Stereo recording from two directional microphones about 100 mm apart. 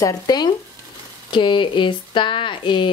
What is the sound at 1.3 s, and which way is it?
Speech, 55° left (ahead or behind).